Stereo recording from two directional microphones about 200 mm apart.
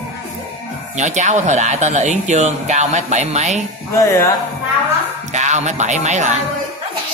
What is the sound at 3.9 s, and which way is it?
Speech, 15° left (ahead or behind).